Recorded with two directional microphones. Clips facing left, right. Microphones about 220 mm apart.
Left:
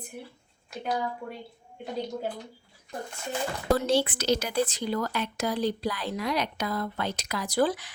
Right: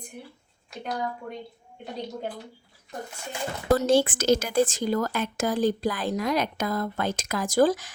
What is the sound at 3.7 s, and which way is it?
Speech, 50° right (ahead or behind).